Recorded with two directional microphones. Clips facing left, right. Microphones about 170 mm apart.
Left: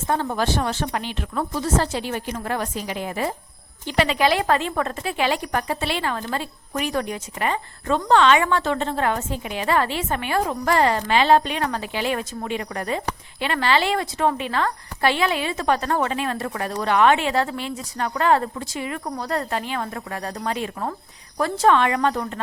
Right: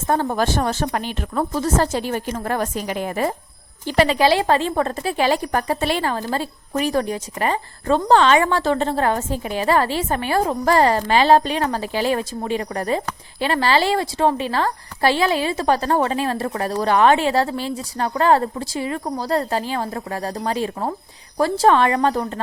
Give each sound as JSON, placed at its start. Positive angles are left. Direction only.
{"t": 0.1, "sound": "a woman's voice", "side_deg": -45}